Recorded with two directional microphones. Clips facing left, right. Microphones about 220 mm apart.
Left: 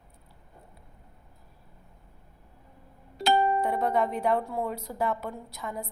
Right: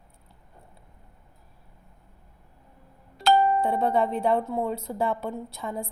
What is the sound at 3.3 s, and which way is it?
Music, 10° left (ahead or behind).